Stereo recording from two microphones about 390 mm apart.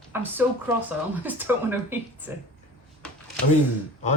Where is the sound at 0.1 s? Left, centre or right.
Centre.